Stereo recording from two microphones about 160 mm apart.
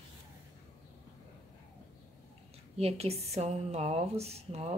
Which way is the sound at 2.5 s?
40° right (ahead or behind).